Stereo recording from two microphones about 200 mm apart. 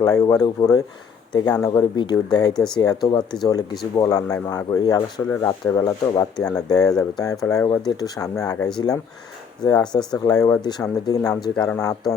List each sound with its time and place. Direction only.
0.0 s speech: 15° left (ahead or behind)
11.5 s speech: 5° left (ahead or behind)